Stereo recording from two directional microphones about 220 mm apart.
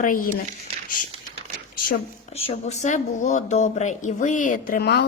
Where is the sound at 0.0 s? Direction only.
40° left (ahead or behind).